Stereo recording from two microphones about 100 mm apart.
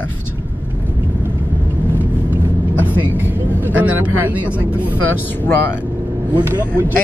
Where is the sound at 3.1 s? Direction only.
20° right (ahead or behind).